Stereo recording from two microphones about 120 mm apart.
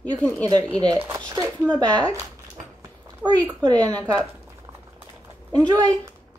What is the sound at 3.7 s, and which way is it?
Speech, 10° left (ahead or behind).